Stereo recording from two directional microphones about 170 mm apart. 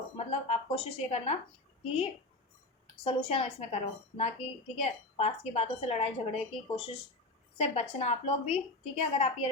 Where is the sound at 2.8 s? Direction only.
30° left (ahead or behind).